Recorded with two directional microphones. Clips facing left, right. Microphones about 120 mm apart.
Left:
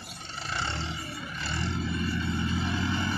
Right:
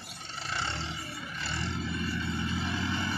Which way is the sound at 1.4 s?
50° left (ahead or behind).